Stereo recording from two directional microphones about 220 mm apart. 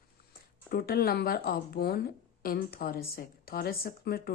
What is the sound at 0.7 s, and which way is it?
A woman's voice, 45° left (ahead or behind).